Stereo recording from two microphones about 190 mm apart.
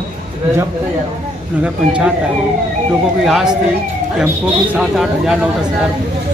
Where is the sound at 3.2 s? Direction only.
Centre (ahead or behind).